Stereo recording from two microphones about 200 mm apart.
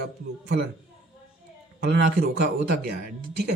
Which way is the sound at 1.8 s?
55° right (ahead or behind).